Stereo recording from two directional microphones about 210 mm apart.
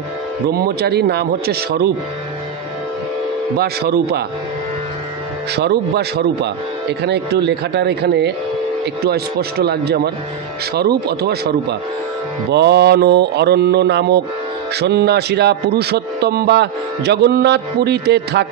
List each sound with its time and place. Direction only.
0.5 s speech: 50° right (ahead or behind)
3.5 s speech: 50° right (ahead or behind)
5.6 s speech: 50° right (ahead or behind)
12.5 s speech: 50° right (ahead or behind)